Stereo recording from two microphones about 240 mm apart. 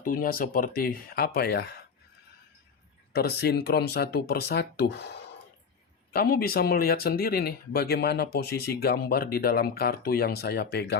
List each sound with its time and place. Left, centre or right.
0.0 s speech: left
3.1 s speech: left